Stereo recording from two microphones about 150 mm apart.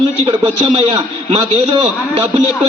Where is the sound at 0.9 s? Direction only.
35° right (ahead or behind).